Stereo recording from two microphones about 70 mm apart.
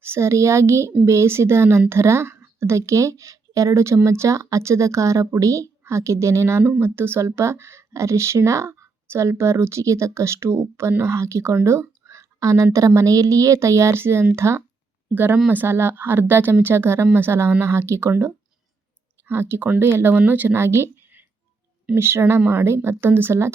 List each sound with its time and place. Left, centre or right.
0.0 s speech: right
15.1 s speech: right
20.1 s speech: right
20.6 s a sound: right
21.9 s speech: right